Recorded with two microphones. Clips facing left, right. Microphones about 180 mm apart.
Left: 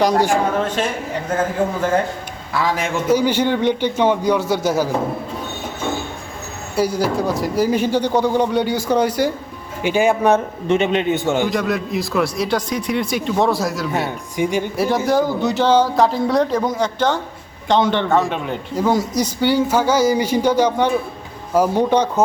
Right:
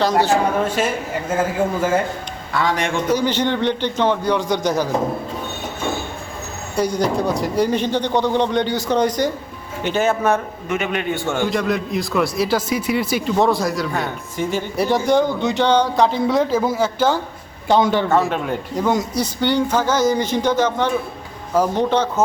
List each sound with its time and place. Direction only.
0.0 s speech: 15° left (ahead or behind)
0.8 s a man's voice: 5° right (ahead or behind)
6.7 s speech: 5° left (ahead or behind)
10.7 s a man's voice: 25° left (ahead or behind)
11.4 s speech: centre (ahead or behind)
13.9 s speech: 15° left (ahead or behind)
14.8 s a man's voice: centre (ahead or behind)
19.1 s speech: 10° left (ahead or behind)